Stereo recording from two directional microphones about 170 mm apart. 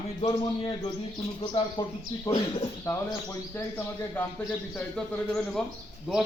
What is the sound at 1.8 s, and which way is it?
A man's voice, 25° left (ahead or behind).